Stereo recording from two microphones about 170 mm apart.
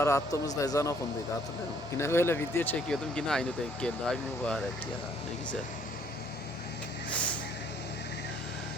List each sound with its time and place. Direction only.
0.0 s a man's voice: 20° left (ahead or behind)
2.0 s speech: 15° left (ahead or behind)
7.1 s vehicle: 10° left (ahead or behind)